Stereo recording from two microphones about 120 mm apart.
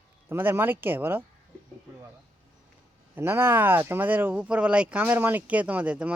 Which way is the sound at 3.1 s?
20° right (ahead or behind).